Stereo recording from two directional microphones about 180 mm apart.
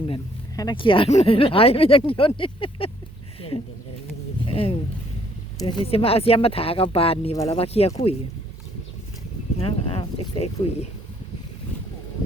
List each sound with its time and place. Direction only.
0.1 s speech: 20° left (ahead or behind)
4.4 s a sound: 30° left (ahead or behind)
5.5 s speech: 30° left (ahead or behind)
9.6 s speech: 30° left (ahead or behind)